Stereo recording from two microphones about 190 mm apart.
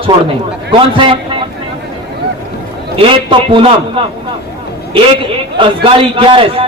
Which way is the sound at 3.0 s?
25° right (ahead or behind).